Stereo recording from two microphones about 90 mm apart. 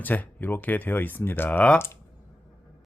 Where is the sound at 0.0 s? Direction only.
20° left (ahead or behind).